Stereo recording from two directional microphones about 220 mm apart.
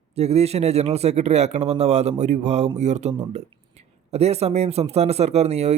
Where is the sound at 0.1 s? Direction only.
30° right (ahead or behind).